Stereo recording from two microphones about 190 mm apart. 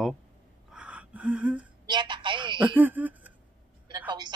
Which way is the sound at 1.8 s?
25° right (ahead or behind).